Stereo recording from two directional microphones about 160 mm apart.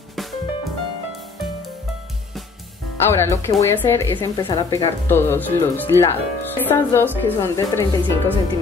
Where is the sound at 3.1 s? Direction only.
15° left (ahead or behind).